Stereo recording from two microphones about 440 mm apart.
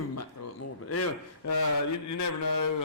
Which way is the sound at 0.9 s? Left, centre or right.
Left.